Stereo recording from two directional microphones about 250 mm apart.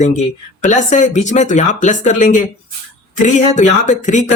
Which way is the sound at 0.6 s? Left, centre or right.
Left.